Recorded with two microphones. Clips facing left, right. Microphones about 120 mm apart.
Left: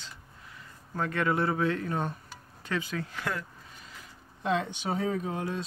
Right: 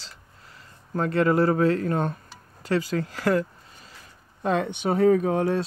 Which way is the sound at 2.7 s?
35° right (ahead or behind).